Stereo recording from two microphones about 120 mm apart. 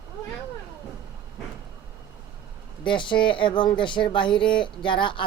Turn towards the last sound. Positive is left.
turn(degrees=45)  # may be behind; listen again after turning